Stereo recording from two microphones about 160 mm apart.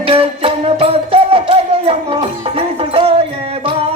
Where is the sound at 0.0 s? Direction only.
35° right (ahead or behind).